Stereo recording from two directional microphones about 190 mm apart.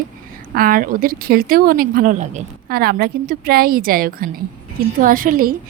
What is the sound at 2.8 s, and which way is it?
Speech, 55° right (ahead or behind).